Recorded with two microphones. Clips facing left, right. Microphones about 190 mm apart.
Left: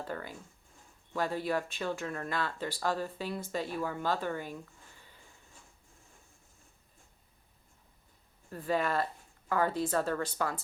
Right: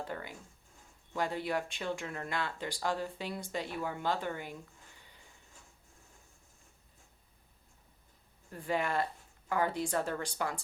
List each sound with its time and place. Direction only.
0.0 s speech: 20° right (ahead or behind)
8.6 s speech: 15° right (ahead or behind)